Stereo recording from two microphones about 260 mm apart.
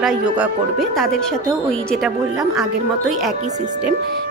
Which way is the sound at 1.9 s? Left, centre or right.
Centre.